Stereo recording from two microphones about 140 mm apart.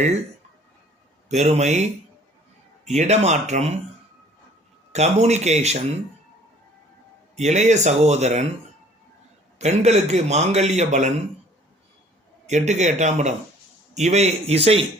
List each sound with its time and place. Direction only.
1.3 s a man's voice: 55° right (ahead or behind)
4.9 s a man's voice: 50° right (ahead or behind)
7.3 s a man's voice: 55° right (ahead or behind)
9.6 s a man's voice: 55° right (ahead or behind)
12.5 s a man's voice: 55° right (ahead or behind)